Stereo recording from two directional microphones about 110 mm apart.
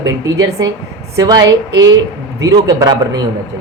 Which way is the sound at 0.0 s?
35° right (ahead or behind).